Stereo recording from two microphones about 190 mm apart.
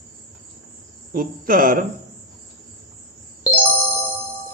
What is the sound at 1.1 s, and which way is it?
Speech, 50° right (ahead or behind).